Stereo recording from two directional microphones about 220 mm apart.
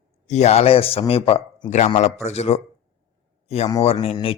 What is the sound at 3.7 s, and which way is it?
Speech, 20° left (ahead or behind).